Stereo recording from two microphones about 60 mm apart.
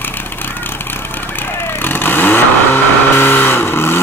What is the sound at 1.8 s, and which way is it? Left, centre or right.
Vehicle, left.